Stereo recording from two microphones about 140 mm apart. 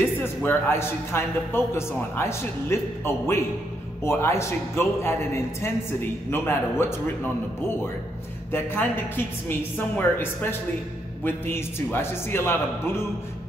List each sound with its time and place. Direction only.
0.0 s a man's voice: 15° left (ahead or behind)
8.5 s a man's voice: 15° left (ahead or behind)